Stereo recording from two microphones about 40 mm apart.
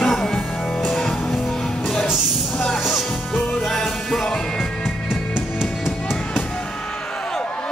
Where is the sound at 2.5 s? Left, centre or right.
Centre.